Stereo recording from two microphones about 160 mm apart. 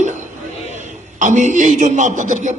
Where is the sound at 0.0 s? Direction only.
50° right (ahead or behind).